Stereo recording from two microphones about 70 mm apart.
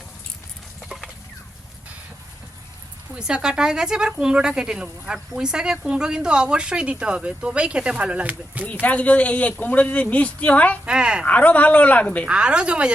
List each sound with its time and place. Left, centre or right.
3.2 s speech: centre
8.6 s speech: left
10.8 s speech: centre
11.3 s speech: left
12.3 s speech: centre